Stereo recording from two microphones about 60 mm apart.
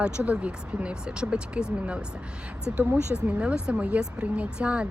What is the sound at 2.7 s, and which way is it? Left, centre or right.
Speech, right.